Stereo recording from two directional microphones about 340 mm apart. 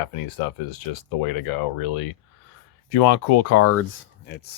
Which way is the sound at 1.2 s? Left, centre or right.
Left.